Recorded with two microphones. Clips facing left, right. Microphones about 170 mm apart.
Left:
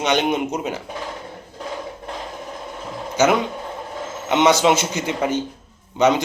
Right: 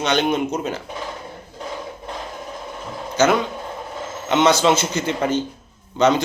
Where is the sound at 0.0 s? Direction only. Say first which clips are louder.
Even; 15° left (ahead or behind).